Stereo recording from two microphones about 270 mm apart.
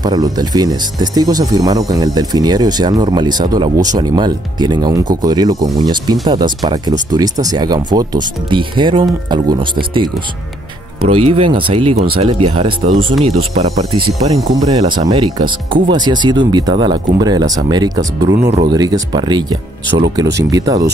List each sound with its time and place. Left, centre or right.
0.0 s speech: centre
11.1 s speech: right